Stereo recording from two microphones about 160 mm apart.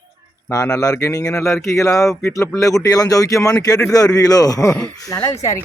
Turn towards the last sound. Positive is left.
turn(degrees=20)  # may be behind; listen again after turning